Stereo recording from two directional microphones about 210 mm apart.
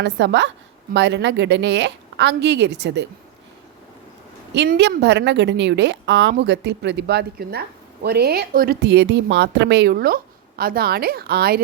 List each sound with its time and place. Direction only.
0.0 s a woman's voice: 60° right (ahead or behind)
4.5 s a woman's voice: 55° right (ahead or behind)